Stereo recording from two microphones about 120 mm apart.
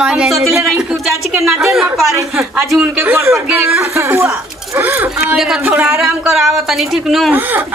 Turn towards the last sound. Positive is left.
turn(degrees=0)  # may be behind; listen again after turning